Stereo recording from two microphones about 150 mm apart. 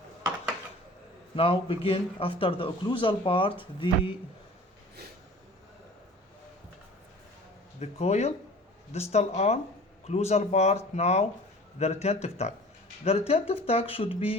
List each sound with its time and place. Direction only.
1.4 s speech: 35° left (ahead or behind)
7.8 s speech: 45° left (ahead or behind)